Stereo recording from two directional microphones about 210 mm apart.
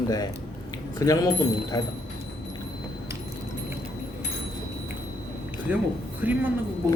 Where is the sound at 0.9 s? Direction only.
15° left (ahead or behind).